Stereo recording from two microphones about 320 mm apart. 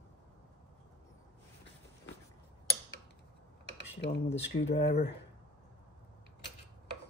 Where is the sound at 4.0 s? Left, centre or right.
Left.